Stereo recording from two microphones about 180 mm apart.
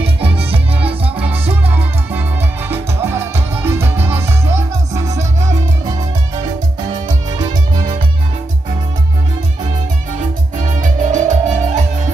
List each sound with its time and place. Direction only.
0.0 s music: 30° right (ahead or behind)
1.5 s music: 10° right (ahead or behind)
10.8 s music: 45° right (ahead or behind)